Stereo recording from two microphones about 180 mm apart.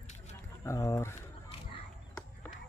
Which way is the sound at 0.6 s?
15° left (ahead or behind).